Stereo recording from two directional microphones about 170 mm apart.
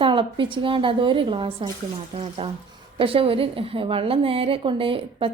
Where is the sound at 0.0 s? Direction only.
30° right (ahead or behind).